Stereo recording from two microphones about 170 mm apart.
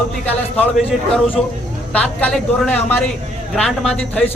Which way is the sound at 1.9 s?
10° left (ahead or behind).